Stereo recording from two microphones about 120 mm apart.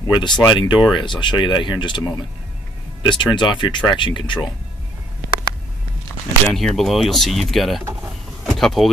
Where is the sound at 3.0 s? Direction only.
40° left (ahead or behind).